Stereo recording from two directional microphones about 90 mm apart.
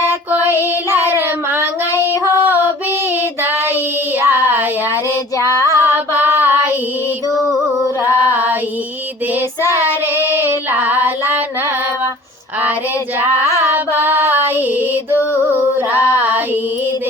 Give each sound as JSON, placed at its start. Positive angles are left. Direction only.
{"t": 0.0, "sound": "child singing", "side_deg": -20}
{"t": 2.2, "sound": "music", "side_deg": -25}
{"t": 4.2, "sound": "a sound", "side_deg": -25}
{"t": 5.4, "sound": "female singing", "side_deg": 35}
{"t": 5.7, "sound": "female singing", "side_deg": -25}
{"t": 10.3, "sound": "music", "side_deg": -20}
{"t": 13.7, "sound": "carnatic music", "side_deg": -25}